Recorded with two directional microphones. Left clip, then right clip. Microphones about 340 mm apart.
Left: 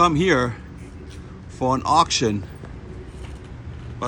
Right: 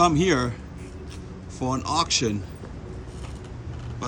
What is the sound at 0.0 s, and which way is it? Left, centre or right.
Speech, centre.